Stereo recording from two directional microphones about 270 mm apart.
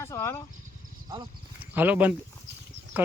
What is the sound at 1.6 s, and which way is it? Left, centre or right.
Speech, centre.